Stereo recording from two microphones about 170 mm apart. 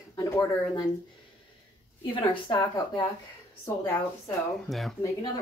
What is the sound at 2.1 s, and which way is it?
A woman's voice, 30° left (ahead or behind).